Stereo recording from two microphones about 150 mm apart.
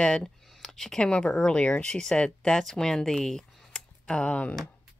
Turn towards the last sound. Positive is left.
turn(degrees=10)  # may be behind; listen again after turning